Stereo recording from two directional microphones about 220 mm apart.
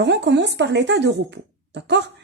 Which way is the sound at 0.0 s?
55° right (ahead or behind).